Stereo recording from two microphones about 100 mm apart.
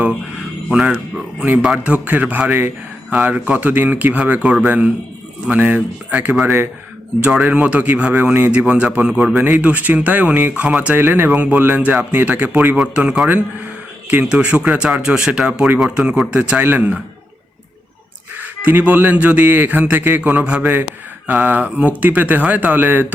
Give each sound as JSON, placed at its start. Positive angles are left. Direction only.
{"t": 0.7, "sound": "speech", "side_deg": -10}
{"t": 18.3, "sound": "speech", "side_deg": -20}